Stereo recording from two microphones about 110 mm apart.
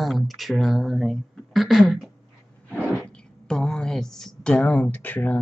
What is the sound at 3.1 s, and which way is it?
A woman's voice, 5° left (ahead or behind).